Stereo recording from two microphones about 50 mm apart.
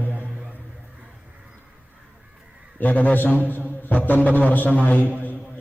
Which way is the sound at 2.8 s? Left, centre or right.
Left.